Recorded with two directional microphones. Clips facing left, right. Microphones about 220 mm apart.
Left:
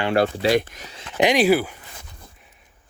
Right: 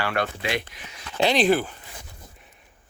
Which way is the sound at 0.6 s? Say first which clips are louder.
Left 9 dB; 45° left (ahead or behind).